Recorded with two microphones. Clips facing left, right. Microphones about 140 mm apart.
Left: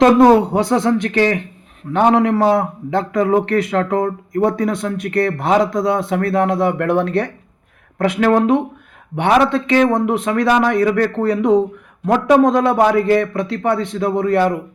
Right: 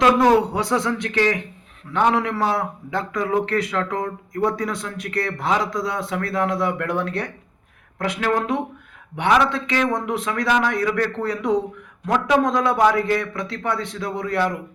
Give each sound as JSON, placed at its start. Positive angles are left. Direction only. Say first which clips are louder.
{"t": 0.0, "sound": "a man's voice", "louder": "left 6 dB", "side_deg": 45}